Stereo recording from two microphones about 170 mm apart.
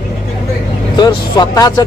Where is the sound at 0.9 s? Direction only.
25° left (ahead or behind).